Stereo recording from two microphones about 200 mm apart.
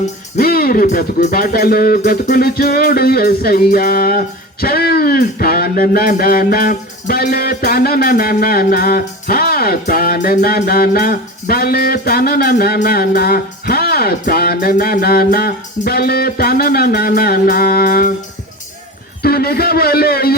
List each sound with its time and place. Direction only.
0.0 s music: 45° left (ahead or behind)
19.2 s music: 50° left (ahead or behind)